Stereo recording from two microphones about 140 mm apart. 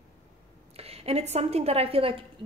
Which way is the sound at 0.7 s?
45° right (ahead or behind).